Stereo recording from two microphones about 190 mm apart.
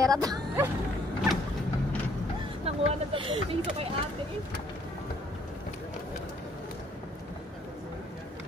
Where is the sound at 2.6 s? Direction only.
30° right (ahead or behind).